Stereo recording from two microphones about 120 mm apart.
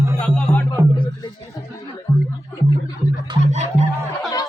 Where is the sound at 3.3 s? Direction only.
40° right (ahead or behind).